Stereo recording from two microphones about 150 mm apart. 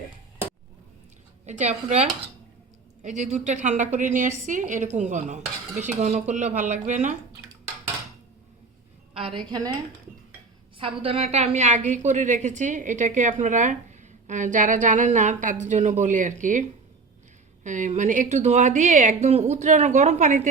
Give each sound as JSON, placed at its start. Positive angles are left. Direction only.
{"t": 1.5, "sound": "a woman's voice", "side_deg": -50}
{"t": 9.1, "sound": "a woman's voice", "side_deg": -35}
{"t": 10.8, "sound": "a woman's voice", "side_deg": -40}